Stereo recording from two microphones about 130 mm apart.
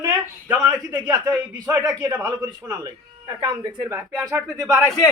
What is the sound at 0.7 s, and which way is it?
A man's voice, 30° right (ahead or behind).